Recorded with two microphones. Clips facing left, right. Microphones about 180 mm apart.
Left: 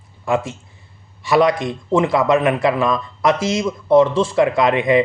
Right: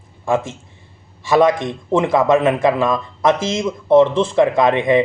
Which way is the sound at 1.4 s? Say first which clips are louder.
Right 2 dB; 25° right (ahead or behind).